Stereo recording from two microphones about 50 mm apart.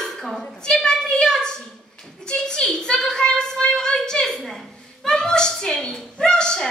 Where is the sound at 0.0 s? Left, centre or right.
Centre.